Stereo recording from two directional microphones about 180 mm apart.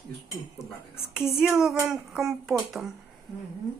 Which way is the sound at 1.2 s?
5° right (ahead or behind).